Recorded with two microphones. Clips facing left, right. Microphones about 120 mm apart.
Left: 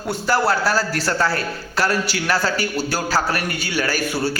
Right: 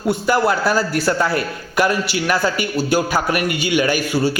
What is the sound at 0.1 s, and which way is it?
A man's voice, 15° right (ahead or behind).